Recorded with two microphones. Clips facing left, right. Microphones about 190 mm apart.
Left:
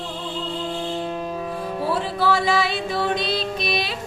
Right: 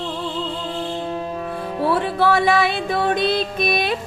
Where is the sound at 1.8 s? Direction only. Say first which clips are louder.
Right 4 dB; 60° right (ahead or behind).